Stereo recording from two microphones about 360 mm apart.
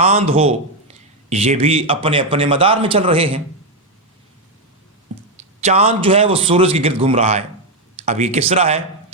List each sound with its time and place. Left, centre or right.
0.0 s speech: centre
5.5 s speech: centre